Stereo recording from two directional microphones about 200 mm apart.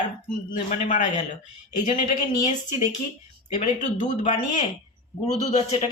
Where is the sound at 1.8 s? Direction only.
40° left (ahead or behind).